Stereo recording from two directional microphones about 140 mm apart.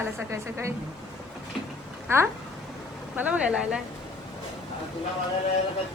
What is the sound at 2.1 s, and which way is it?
A woman's voice, 20° right (ahead or behind).